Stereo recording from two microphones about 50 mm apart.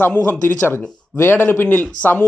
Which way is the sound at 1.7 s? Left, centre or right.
Left.